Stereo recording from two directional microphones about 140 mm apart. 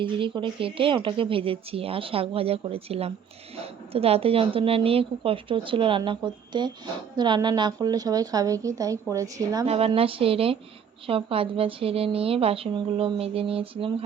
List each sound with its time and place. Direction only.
0.0 s a woman's voice: 35° right (ahead or behind)
9.6 s speech: 45° right (ahead or behind)